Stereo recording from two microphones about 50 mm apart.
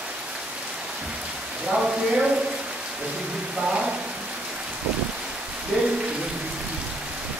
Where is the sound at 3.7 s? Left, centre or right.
Centre.